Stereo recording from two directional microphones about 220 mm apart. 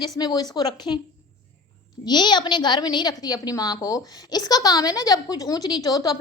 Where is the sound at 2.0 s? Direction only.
20° left (ahead or behind).